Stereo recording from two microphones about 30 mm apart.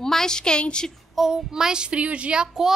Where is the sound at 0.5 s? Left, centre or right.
Left.